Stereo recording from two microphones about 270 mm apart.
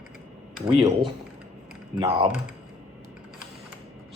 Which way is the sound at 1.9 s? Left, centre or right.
Centre.